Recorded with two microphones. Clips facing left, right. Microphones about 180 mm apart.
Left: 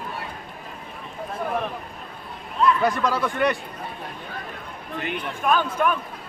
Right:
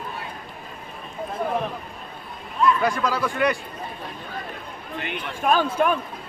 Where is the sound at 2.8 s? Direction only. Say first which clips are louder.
Left 1 dB; centre (ahead or behind).